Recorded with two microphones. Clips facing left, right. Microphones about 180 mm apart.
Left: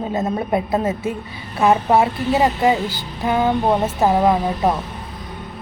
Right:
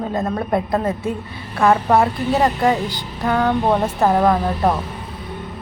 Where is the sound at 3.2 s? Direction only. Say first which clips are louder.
Even; 15° left (ahead or behind).